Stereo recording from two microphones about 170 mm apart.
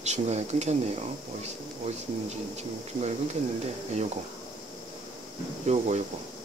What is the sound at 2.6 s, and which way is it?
Speech, 40° right (ahead or behind).